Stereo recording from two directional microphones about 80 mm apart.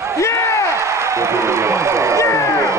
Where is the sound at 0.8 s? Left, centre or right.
Right.